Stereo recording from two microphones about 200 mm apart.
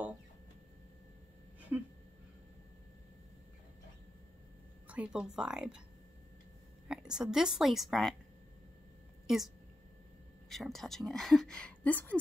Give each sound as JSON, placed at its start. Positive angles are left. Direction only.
{"t": 1.7, "sound": "a sound", "side_deg": -15}
{"t": 4.8, "sound": "speech", "side_deg": -5}
{"t": 6.9, "sound": "speech", "side_deg": -5}
{"t": 10.5, "sound": "speech", "side_deg": 0}